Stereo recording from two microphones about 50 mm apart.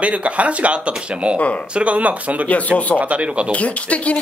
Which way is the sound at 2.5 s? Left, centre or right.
Left.